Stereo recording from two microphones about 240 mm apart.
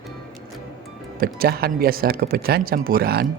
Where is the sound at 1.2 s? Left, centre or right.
Right.